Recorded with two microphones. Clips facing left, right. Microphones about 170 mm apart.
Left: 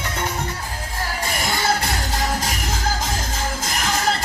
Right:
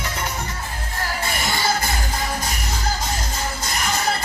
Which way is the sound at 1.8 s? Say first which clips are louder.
Left 1 dB; 90° left.